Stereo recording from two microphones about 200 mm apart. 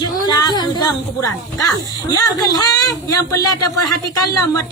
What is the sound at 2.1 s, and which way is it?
A man's voice, 20° left (ahead or behind).